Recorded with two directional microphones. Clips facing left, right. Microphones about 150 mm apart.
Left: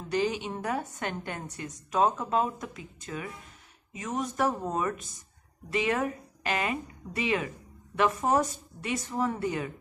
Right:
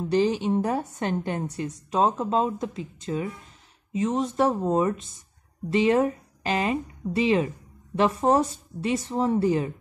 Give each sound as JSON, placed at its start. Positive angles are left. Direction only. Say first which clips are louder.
{"t": 0.1, "sound": "a woman's voice", "louder": "right 6 dB", "side_deg": -30}